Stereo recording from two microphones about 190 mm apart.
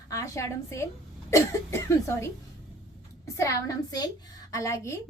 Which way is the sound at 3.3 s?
15° left (ahead or behind).